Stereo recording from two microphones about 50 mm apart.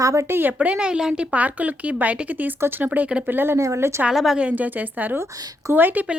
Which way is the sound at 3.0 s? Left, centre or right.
Right.